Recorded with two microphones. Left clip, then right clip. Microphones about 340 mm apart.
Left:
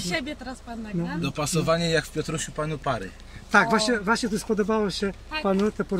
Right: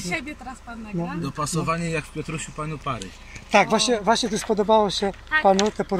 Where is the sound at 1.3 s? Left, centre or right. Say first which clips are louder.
Left 2 dB; centre.